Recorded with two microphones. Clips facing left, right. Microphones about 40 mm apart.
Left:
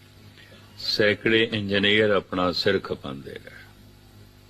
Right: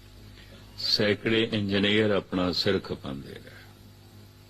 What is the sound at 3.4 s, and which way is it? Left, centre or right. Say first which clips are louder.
Speech: left 4 dB; left.